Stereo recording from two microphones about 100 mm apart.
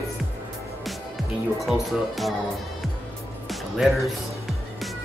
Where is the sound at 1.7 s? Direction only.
Centre (ahead or behind).